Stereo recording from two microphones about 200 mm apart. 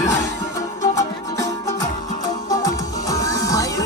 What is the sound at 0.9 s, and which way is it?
Music, 15° left (ahead or behind).